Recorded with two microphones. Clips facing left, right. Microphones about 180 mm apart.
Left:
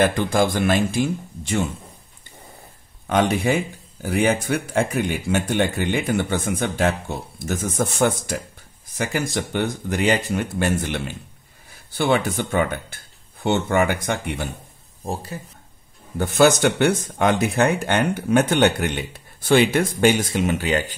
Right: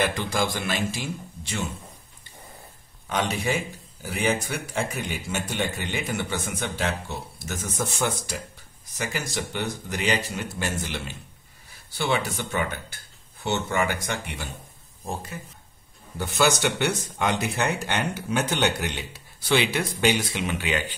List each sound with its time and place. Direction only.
0.0 s speech: 55° left (ahead or behind)
3.1 s speech: 55° left (ahead or behind)
15.0 s speech: 35° left (ahead or behind)
16.2 s speech: 50° left (ahead or behind)